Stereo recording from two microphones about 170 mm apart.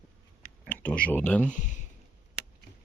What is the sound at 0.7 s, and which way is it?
Speech, 10° left (ahead or behind).